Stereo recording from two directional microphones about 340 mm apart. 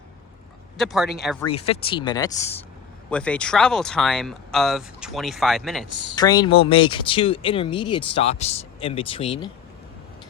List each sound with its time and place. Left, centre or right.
0.8 s speech: centre
1.5 s speech: centre
6.1 s speech: centre